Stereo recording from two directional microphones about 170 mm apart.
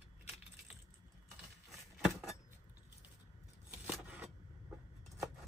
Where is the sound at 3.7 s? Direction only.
10° right (ahead or behind).